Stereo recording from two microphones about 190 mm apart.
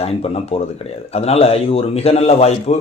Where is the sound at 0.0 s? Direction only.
30° left (ahead or behind).